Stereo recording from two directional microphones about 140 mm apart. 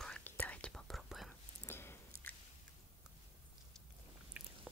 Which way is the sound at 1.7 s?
15° left (ahead or behind).